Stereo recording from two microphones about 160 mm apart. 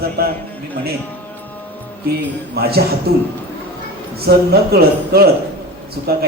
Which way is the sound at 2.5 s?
80° right.